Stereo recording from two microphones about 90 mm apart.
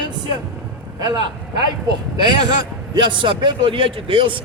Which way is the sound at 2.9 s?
60° right (ahead or behind).